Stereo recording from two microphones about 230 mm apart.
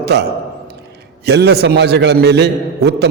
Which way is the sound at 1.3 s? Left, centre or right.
Right.